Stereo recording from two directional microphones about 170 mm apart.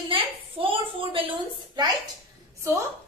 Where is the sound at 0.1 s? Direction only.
30° right (ahead or behind).